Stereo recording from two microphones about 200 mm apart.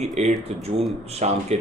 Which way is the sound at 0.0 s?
35° right (ahead or behind).